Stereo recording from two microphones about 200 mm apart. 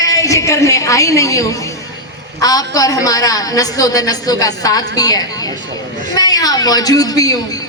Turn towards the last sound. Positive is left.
turn(degrees=20)  # may be behind; listen again after turning